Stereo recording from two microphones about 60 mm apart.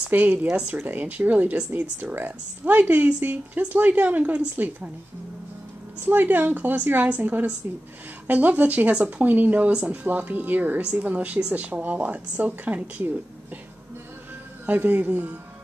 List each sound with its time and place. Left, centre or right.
0.1 s a woman's voice: right
6.0 s a woman's voice: right
9.7 s speech: centre
10.0 s a woman's voice: right
14.7 s a woman's voice: right